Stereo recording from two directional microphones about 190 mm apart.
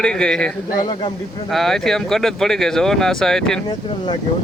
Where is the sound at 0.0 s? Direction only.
5° left (ahead or behind).